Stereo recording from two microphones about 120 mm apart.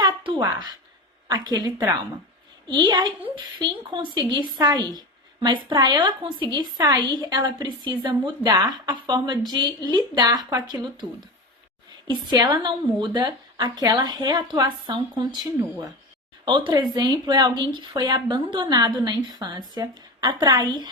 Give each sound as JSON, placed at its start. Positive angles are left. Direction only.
{"t": 0.2, "sound": "a woman's voice", "side_deg": -45}
{"t": 12.0, "sound": "a woman's voice", "side_deg": -35}